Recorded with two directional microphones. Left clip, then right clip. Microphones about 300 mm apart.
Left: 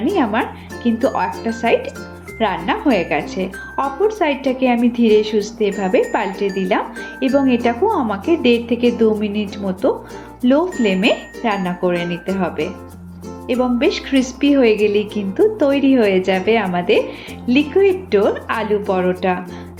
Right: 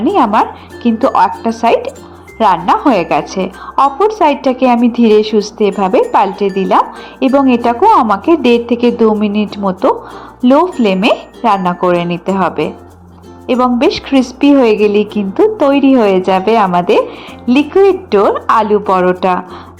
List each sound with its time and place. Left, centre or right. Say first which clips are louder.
0.1 s a woman's voice: right 9 dB; centre